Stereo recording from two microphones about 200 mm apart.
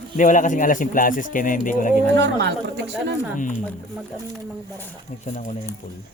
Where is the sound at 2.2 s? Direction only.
60° right (ahead or behind).